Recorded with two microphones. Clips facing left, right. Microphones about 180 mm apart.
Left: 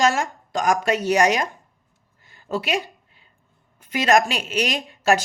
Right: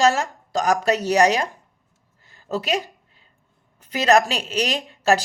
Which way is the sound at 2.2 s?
35° right (ahead or behind).